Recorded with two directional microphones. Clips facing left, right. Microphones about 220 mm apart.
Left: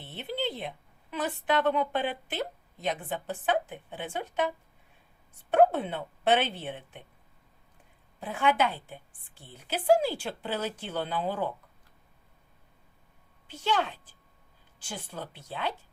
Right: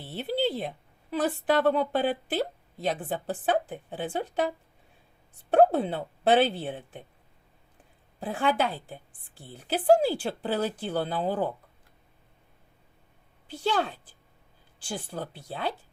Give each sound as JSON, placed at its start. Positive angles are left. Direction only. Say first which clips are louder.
{"t": 0.0, "sound": "a woman's voice", "louder": "right 5 dB", "side_deg": -35}
{"t": 8.2, "sound": "a woman's voice", "louder": "right 1 dB", "side_deg": -35}
{"t": 13.5, "sound": "a woman's voice", "louder": "right 2 dB", "side_deg": -35}